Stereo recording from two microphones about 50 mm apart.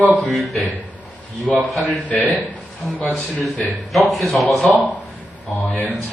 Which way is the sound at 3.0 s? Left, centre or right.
Centre.